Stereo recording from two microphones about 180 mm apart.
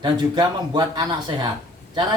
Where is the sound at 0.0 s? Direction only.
25° right (ahead or behind).